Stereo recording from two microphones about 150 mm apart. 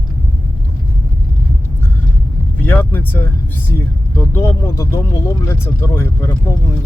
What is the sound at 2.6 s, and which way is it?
Speech, 15° left (ahead or behind).